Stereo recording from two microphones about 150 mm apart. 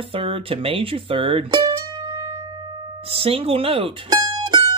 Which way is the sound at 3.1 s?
40° right (ahead or behind).